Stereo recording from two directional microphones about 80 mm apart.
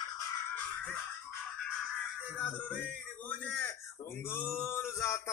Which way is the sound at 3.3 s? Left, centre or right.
Centre.